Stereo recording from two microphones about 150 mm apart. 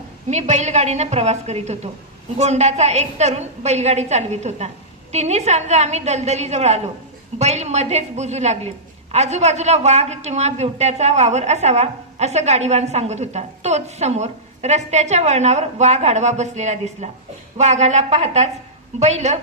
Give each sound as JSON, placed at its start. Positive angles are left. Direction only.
{"t": 0.3, "sound": "a man's voice", "side_deg": -50}